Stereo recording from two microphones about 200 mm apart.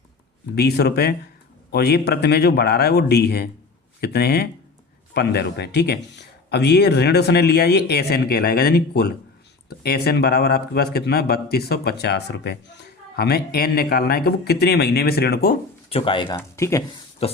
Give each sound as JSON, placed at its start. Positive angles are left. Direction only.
{"t": 0.5, "sound": "a man's voice", "side_deg": 55}
{"t": 15.9, "sound": "speech", "side_deg": 25}
{"t": 16.3, "sound": "speech", "side_deg": 15}
{"t": 17.2, "sound": "speech", "side_deg": 30}